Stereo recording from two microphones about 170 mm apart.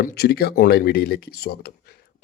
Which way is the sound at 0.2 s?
70° left (ahead or behind).